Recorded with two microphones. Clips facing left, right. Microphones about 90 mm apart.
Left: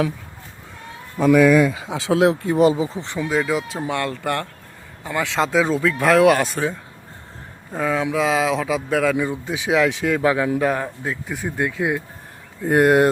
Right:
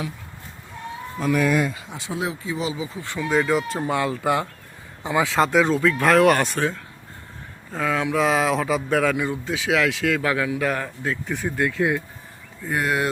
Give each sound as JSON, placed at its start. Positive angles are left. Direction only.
{"t": 1.9, "sound": "speech", "side_deg": 90}
{"t": 3.0, "sound": "speech", "side_deg": 20}
{"t": 3.2, "sound": "speech", "side_deg": 0}
{"t": 9.3, "sound": "speech", "side_deg": 20}
{"t": 12.6, "sound": "speech", "side_deg": 55}